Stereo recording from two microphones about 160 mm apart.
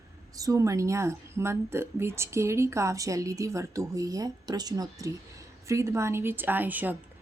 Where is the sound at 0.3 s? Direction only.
20° right (ahead or behind).